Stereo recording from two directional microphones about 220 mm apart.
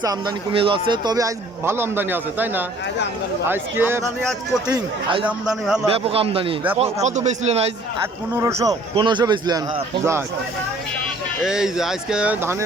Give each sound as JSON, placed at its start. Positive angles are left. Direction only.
{"t": 0.0, "sound": "speech", "side_deg": -20}
{"t": 4.6, "sound": "speech", "side_deg": -20}
{"t": 5.2, "sound": "speech", "side_deg": 0}
{"t": 5.9, "sound": "speech", "side_deg": -25}
{"t": 11.4, "sound": "speech", "side_deg": 0}